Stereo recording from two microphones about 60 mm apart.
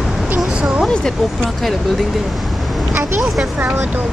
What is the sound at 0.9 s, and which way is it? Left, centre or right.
Speech, centre.